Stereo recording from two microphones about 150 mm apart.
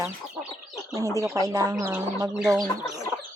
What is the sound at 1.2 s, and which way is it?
Speech, 25° right (ahead or behind).